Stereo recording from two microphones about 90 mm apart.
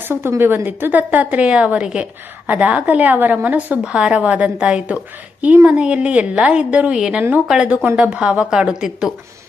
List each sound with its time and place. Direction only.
0.0 s a woman's voice: 25° right (ahead or behind); by 9.1 s 5° right (ahead or behind)